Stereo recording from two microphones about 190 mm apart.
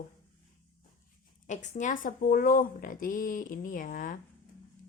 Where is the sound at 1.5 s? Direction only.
45° left (ahead or behind).